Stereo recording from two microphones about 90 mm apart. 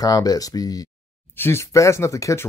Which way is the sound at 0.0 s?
45° left (ahead or behind).